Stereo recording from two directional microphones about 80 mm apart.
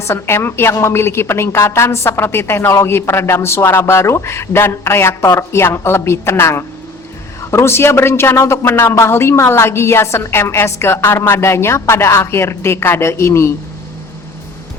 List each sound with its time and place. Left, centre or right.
0.0 s speech: left